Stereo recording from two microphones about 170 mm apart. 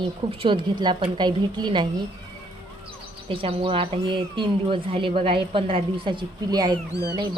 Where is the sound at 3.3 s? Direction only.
35° right (ahead or behind).